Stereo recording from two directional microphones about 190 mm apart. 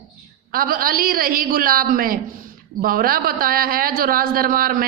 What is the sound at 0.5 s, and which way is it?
A woman's voice, 50° right (ahead or behind).